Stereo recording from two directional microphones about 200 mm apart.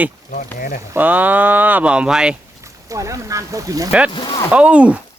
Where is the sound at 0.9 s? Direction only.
10° right (ahead or behind).